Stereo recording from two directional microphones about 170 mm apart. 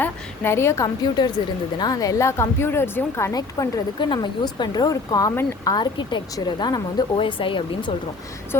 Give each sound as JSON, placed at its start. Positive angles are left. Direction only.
{"t": 0.0, "sound": "a woman's voice", "side_deg": 15}
{"t": 5.7, "sound": "speech", "side_deg": 25}